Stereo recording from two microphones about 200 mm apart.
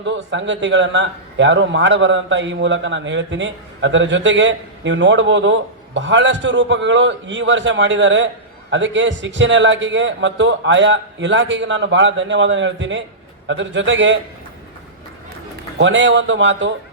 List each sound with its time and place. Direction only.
0.0 s a man's voice: 65° right (ahead or behind)
15.8 s a man's voice: 65° right (ahead or behind)